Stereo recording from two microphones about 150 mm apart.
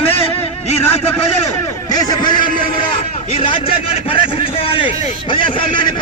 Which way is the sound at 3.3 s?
35° left (ahead or behind).